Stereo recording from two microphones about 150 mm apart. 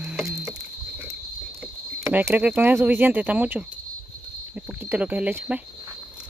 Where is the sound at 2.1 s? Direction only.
10° right (ahead or behind).